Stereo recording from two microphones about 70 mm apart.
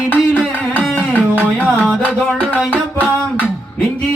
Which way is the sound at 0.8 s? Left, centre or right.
Left.